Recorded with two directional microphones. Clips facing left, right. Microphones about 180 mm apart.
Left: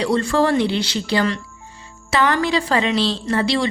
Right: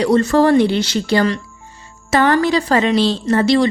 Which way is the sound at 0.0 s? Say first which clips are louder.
Right 5 dB; 45° right (ahead or behind).